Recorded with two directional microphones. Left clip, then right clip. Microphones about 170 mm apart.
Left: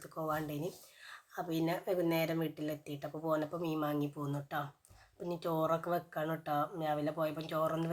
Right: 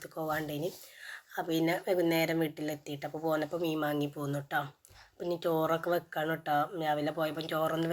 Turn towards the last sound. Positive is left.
turn(degrees=-15)  # may be behind; listen again after turning